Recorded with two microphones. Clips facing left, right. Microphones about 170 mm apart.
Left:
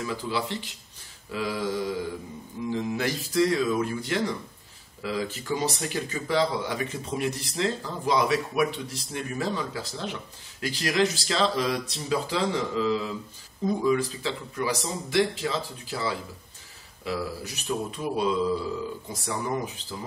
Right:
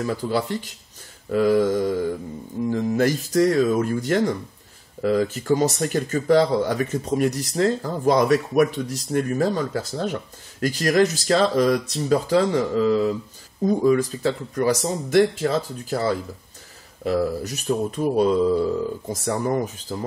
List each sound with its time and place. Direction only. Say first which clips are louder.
0.0 s speech: right 6 dB; 45° right (ahead or behind)